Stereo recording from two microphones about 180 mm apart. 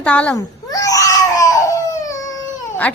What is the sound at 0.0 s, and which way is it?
Speech, 10° left (ahead or behind).